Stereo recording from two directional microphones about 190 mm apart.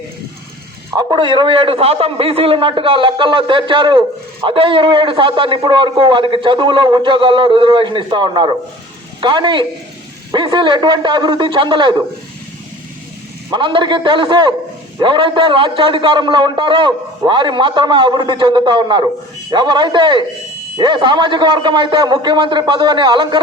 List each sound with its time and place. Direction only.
0.9 s a man's voice: 25° right (ahead or behind)
13.5 s a man's voice: 25° right (ahead or behind)